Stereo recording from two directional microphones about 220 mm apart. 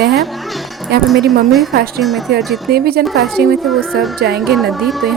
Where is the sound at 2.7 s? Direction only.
45° right (ahead or behind).